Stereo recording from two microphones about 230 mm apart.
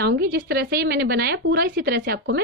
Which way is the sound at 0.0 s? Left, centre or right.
Right.